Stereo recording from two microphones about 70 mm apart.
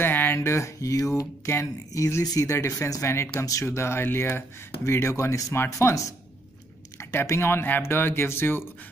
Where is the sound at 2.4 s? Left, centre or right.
Left.